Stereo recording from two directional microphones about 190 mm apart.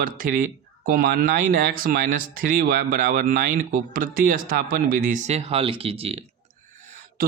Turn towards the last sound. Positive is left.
turn(degrees=-30)  # may be behind; listen again after turning